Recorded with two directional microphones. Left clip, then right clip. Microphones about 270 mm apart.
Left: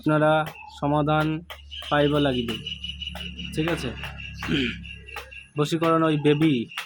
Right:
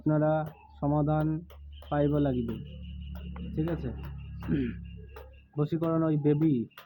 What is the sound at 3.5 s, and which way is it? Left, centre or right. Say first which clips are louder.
A man's voice: left 7 dB; left.